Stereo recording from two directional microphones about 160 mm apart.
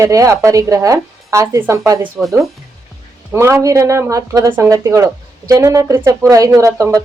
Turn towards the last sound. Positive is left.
turn(degrees=-15)  # may be behind; listen again after turning